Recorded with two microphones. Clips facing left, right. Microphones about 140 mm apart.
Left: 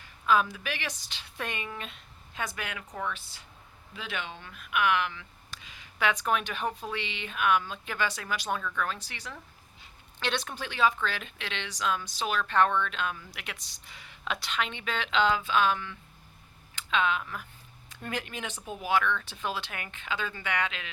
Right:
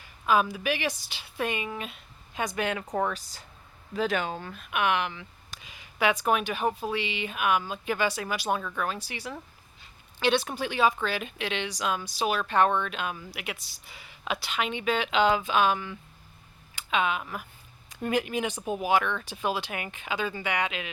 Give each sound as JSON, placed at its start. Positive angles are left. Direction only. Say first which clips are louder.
{"t": 0.0, "sound": "speech", "louder": "right 1 dB", "side_deg": -10}
{"t": 2.6, "sound": "speech", "louder": "right 7 dB", "side_deg": -35}
{"t": 4.6, "sound": "speech", "louder": "even", "side_deg": -25}